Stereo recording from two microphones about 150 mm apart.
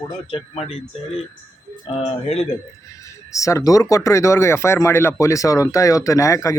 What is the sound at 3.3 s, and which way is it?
Speech, 20° left (ahead or behind).